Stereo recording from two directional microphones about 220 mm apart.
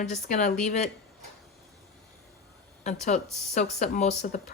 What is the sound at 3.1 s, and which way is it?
Speech, 30° left (ahead or behind).